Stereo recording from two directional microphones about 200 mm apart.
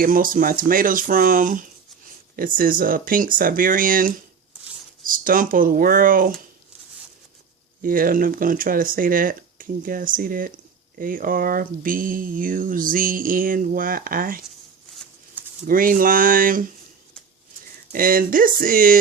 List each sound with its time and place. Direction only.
0.0 s speech: 45° right (ahead or behind)
7.8 s speech: 45° right (ahead or behind)
15.6 s speech: 45° right (ahead or behind)
17.9 s speech: 45° right (ahead or behind)